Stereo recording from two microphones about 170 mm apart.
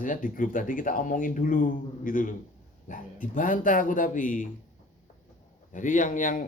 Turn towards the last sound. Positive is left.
turn(degrees=50)  # may be behind; listen again after turning